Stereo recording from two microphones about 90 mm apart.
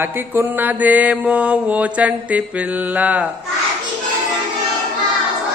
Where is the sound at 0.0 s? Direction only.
20° right (ahead or behind).